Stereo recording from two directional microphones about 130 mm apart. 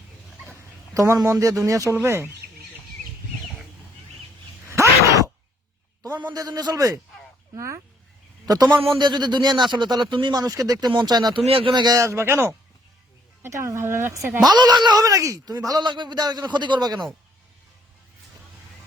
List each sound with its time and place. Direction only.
0.9 s a man's voice: 25° right (ahead or behind)
4.6 s a sound: 25° right (ahead or behind)
6.3 s a man's voice: 30° right (ahead or behind)
11.4 s a man's voice: 45° right (ahead or behind); by 14.3 s 20° right (ahead or behind)
14.4 s speech: 35° right (ahead or behind)